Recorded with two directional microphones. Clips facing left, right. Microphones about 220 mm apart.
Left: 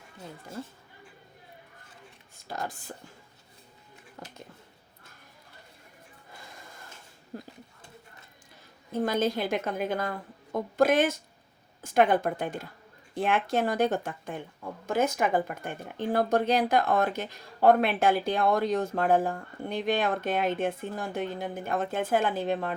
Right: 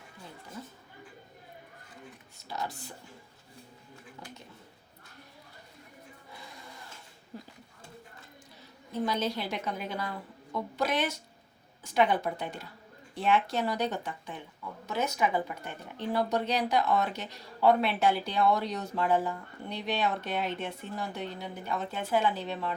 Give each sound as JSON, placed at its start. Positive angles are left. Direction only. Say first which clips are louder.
{"t": 2.5, "sound": "speech", "louder": "left 1 dB", "side_deg": 50}
{"t": 8.9, "sound": "speech", "louder": "left 4 dB", "side_deg": 50}